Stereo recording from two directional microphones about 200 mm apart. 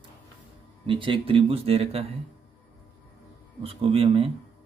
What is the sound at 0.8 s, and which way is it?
Speech, 25° right (ahead or behind).